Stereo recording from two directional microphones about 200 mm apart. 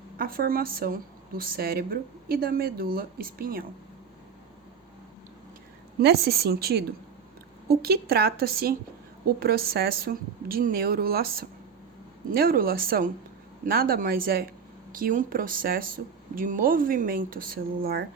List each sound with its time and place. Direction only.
0.2 s a woman's voice: 45° right (ahead or behind)
6.0 s a woman's voice: 55° right (ahead or behind)